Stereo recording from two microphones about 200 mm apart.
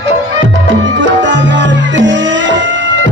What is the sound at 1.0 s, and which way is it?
Music, 65° right (ahead or behind).